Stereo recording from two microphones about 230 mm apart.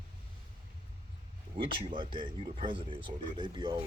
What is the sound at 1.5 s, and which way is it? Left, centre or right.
Speech, right.